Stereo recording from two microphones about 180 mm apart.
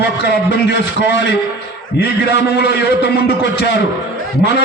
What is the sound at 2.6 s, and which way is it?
A man's voice, 70° left (ahead or behind).